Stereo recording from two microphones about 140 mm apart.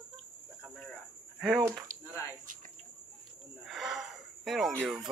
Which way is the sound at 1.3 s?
Centre (ahead or behind).